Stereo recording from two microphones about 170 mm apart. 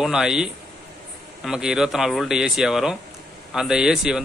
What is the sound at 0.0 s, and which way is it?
A man's voice, 5° right (ahead or behind).